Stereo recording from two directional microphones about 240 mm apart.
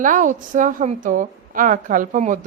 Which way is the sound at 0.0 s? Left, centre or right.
Right.